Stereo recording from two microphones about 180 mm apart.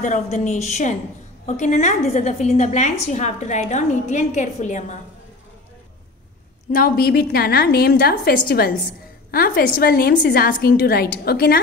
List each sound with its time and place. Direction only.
0.0 s a woman's voice: 45° left (ahead or behind)
6.7 s a woman's voice: 55° left (ahead or behind)